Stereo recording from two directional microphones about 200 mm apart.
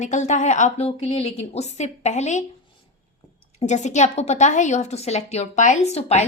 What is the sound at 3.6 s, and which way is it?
A woman's voice, 35° left (ahead or behind).